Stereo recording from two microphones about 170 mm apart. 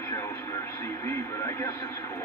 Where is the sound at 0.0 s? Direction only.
15° left (ahead or behind).